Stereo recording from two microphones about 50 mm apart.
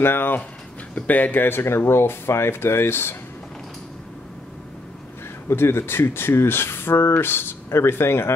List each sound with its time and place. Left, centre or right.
0.0 s speech: left
0.9 s speech: left
5.5 s speech: left